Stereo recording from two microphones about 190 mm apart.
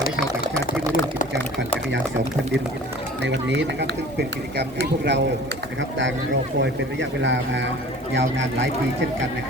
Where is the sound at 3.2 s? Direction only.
70° right (ahead or behind).